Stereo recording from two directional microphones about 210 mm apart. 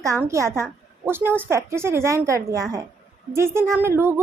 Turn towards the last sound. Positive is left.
turn(degrees=-10)  # may be behind; listen again after turning